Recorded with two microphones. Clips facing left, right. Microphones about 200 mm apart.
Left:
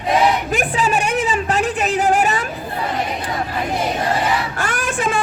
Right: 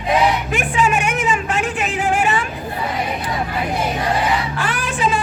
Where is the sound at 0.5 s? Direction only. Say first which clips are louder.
Even; 35° left (ahead or behind).